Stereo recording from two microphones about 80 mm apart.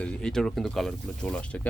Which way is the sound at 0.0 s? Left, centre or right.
Centre.